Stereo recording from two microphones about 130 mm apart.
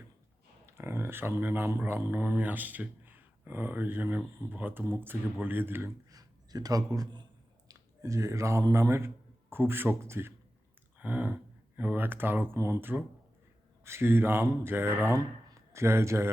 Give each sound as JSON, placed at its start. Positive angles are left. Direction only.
{"t": 0.6, "sound": "speech", "side_deg": -20}
{"t": 6.1, "sound": "a man's voice", "side_deg": -30}
{"t": 10.9, "sound": "a sound", "side_deg": -15}
{"t": 11.8, "sound": "speech", "side_deg": -15}